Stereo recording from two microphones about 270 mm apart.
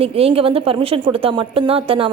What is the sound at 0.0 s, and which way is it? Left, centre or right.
Speech, right.